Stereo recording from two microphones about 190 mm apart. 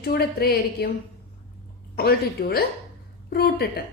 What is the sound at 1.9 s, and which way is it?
A woman's voice, 55° left (ahead or behind).